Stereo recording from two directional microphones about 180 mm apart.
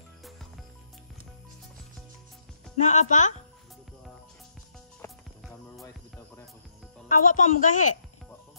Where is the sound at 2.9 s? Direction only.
40° left (ahead or behind).